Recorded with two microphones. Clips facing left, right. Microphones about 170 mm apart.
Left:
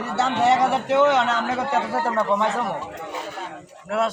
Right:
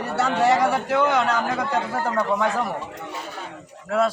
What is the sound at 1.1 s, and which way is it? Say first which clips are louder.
Speech: even; 25° left (ahead or behind).